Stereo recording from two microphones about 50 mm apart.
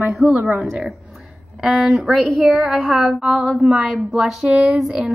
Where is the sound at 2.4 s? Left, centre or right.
Right.